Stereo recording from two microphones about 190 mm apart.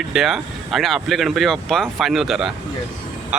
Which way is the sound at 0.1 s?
Centre (ahead or behind).